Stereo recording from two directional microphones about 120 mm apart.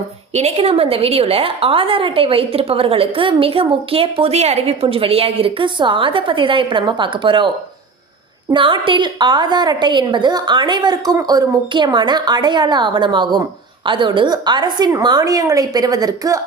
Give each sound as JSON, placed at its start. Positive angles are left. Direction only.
{"t": 0.3, "sound": "a woman's voice", "side_deg": -60}
{"t": 8.5, "sound": "a woman's voice", "side_deg": -45}